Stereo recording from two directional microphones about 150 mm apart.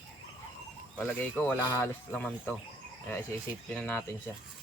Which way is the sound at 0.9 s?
10° left (ahead or behind).